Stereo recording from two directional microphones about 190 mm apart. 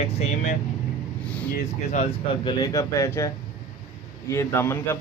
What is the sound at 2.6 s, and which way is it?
Speech, 20° left (ahead or behind).